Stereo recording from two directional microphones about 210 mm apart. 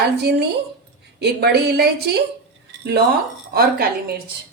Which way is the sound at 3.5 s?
45° right (ahead or behind).